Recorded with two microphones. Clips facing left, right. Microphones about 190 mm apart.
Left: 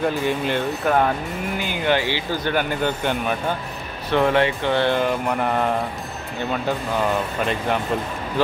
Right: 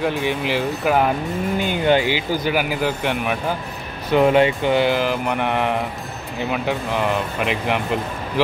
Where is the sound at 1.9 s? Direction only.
15° right (ahead or behind).